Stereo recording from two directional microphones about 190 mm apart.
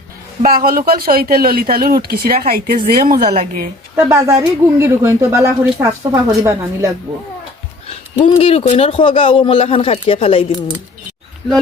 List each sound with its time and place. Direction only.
0.4 s speech: 50° right (ahead or behind)
3.9 s speech: 15° right (ahead or behind)
8.2 s speech: 30° left (ahead or behind)